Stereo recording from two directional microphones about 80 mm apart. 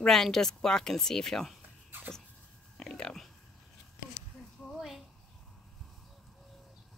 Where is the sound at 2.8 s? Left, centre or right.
Centre.